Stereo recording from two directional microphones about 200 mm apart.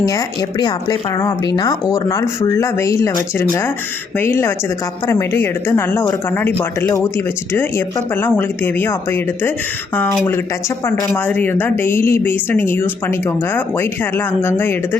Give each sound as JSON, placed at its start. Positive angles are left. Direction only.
{"t": 0.0, "sound": "a woman's voice", "side_deg": 20}